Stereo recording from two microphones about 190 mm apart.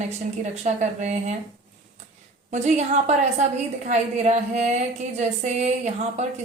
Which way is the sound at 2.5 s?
40° right (ahead or behind).